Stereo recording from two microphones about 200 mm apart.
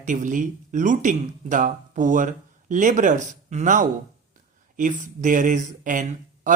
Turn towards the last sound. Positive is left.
turn(degrees=-40)  # may be behind; listen again after turning